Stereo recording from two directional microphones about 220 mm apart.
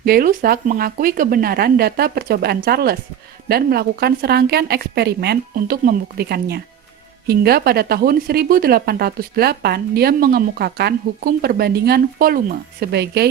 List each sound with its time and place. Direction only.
0.0 s speech: 40° right (ahead or behind)